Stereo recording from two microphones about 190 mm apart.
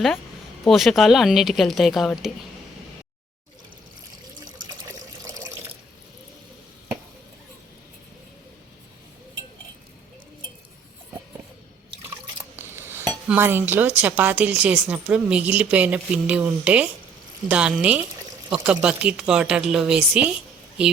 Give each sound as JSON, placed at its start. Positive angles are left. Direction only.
{"t": 0.7, "sound": "speech", "side_deg": 0}
{"t": 5.2, "sound": "water tap", "side_deg": -15}
{"t": 12.5, "sound": "dishes", "side_deg": -10}
{"t": 13.2, "sound": "speech", "side_deg": -10}